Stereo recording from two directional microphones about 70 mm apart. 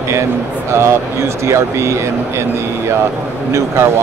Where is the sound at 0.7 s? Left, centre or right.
Right.